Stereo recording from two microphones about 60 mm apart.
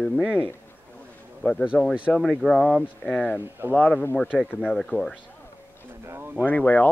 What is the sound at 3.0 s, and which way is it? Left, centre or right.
Speech, centre.